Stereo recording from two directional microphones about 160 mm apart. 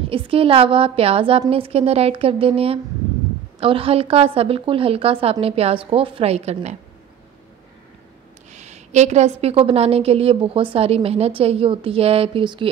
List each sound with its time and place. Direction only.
0.1 s a woman's voice: 35° right (ahead or behind)
8.5 s a woman's voice: 45° right (ahead or behind)